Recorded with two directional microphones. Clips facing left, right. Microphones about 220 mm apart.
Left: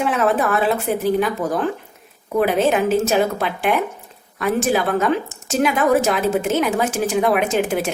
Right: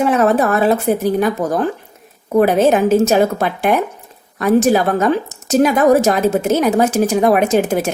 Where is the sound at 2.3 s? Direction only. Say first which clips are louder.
Right 5 dB; 45° right (ahead or behind).